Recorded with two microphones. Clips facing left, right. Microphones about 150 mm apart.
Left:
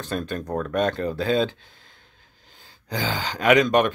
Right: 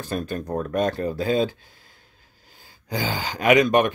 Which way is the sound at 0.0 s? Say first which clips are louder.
Right 1 dB; 10° right (ahead or behind).